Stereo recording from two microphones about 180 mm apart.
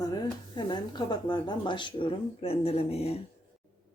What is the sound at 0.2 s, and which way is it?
Speech, 25° left (ahead or behind).